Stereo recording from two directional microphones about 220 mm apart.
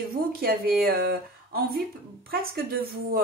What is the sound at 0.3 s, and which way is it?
Speech, 45° right (ahead or behind).